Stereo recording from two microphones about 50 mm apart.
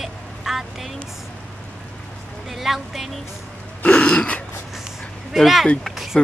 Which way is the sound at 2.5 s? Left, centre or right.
Centre.